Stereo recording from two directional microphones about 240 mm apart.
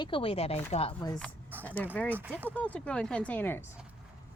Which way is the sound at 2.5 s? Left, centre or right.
Centre.